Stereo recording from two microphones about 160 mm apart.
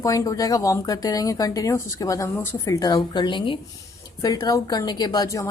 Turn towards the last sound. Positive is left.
turn(degrees=20)  # may be behind; listen again after turning